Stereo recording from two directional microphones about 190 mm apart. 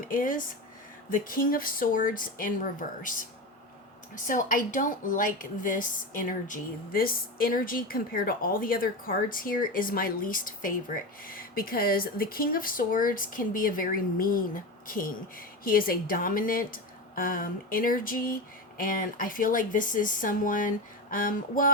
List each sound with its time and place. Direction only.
0.1 s speech: 45° left (ahead or behind)
4.1 s speech: 45° left (ahead or behind)